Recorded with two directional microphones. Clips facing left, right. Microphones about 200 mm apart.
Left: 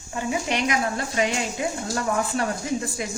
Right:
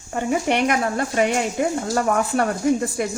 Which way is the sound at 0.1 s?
55° right (ahead or behind).